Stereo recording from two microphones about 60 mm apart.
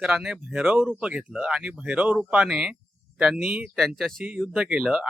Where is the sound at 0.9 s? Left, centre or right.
Centre.